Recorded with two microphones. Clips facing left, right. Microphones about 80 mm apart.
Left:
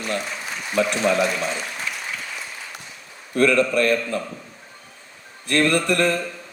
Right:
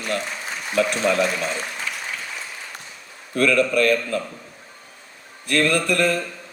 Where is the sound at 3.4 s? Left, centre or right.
Left.